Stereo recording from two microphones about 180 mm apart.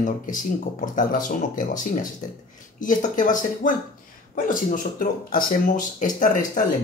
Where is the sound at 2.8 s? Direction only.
45° left (ahead or behind).